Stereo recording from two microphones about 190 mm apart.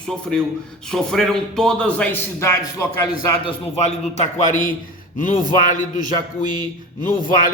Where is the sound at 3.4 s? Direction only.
35° left (ahead or behind).